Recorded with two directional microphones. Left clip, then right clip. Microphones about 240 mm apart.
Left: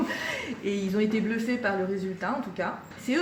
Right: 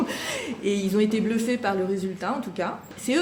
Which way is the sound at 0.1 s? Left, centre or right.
Right.